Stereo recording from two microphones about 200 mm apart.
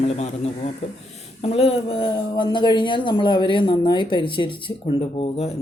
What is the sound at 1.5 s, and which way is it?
Speech, 30° left (ahead or behind).